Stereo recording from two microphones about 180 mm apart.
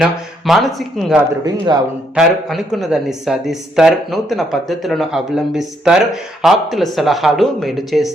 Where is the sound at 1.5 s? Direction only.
20° right (ahead or behind).